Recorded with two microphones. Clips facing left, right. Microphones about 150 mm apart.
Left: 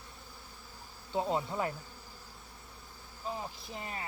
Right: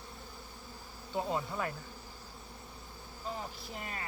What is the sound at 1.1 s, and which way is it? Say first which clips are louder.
Insect: left 2 dB; 20° left (ahead or behind).